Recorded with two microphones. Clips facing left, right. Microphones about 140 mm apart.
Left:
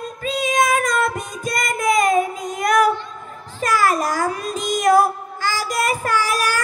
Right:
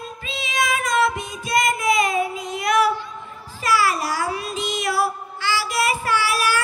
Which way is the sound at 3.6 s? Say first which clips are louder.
Left 2 dB; 45° left (ahead or behind).